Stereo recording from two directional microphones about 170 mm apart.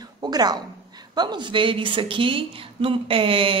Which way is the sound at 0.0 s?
25° right (ahead or behind).